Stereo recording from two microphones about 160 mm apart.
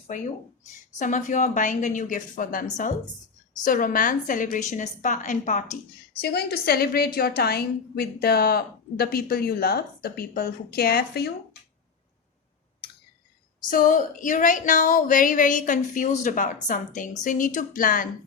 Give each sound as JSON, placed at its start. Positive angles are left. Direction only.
{"t": 0.9, "sound": "a woman's voice", "side_deg": 50}
{"t": 6.1, "sound": "a woman's voice", "side_deg": 80}
{"t": 13.7, "sound": "speech", "side_deg": 60}